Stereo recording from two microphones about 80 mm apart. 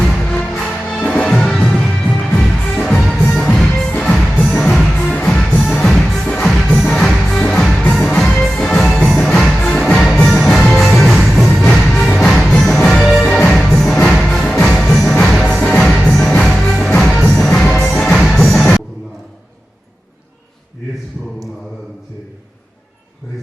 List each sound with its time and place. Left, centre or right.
0.0 s music: centre
4.9 s music: centre
5.5 s music: left
5.8 s music: centre
13.2 s music: centre